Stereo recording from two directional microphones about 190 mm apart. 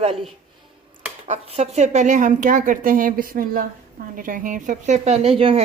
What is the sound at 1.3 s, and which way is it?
A woman's voice, 35° right (ahead or behind).